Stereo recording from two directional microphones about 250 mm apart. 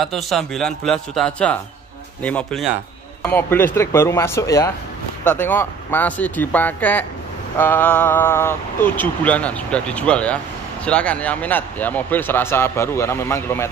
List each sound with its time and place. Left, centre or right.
0.0 s a man's voice: centre